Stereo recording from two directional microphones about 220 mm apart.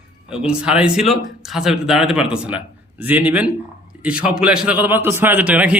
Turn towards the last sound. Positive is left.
turn(degrees=-5)  # may be behind; listen again after turning